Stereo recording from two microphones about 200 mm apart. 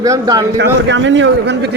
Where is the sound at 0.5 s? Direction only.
60° right (ahead or behind).